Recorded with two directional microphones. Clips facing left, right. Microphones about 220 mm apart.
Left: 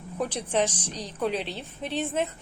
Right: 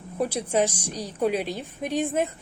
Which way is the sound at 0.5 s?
10° right (ahead or behind).